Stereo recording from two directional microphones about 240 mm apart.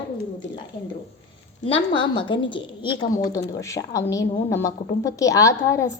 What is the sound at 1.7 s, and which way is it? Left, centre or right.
A woman's voice, left.